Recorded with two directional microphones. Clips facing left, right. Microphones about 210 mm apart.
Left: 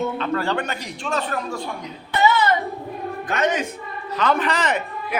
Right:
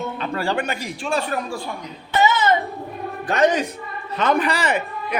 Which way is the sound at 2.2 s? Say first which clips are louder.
Left 1 dB; 20° right (ahead or behind).